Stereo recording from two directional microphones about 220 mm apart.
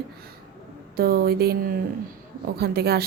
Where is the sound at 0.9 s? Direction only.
45° right (ahead or behind).